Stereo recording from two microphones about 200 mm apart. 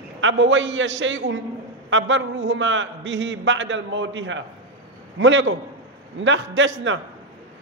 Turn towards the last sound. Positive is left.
turn(degrees=-70)  # may be behind; listen again after turning